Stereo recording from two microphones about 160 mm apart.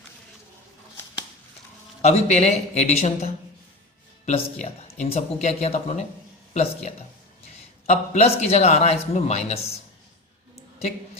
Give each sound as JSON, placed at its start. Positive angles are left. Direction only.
{"t": 2.0, "sound": "speech", "side_deg": 40}
{"t": 4.3, "sound": "a man's voice", "side_deg": 45}
{"t": 10.8, "sound": "a sound", "side_deg": 40}